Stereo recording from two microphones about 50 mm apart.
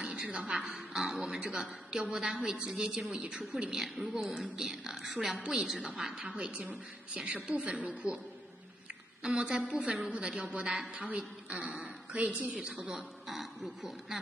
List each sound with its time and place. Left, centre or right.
0.0 s a woman's voice: centre
3.7 s a woman's voice: centre
6.5 s a woman's voice: right
9.2 s a woman's voice: centre
13.3 s speech: centre